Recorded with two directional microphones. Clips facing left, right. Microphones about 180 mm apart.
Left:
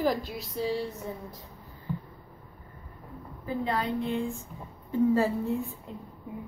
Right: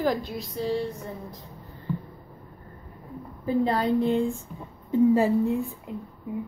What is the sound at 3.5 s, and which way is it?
Speech, 35° right (ahead or behind).